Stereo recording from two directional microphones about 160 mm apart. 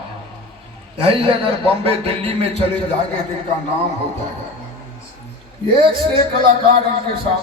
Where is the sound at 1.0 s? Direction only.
35° right (ahead or behind).